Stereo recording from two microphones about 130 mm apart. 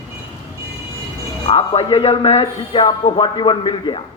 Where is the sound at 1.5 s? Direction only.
50° left (ahead or behind).